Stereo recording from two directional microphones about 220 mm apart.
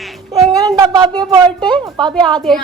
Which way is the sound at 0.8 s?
20° right (ahead or behind).